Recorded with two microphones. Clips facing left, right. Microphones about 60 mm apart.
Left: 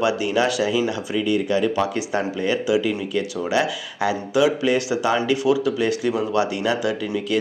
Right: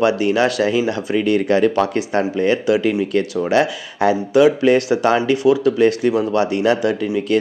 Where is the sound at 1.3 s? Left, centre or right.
Right.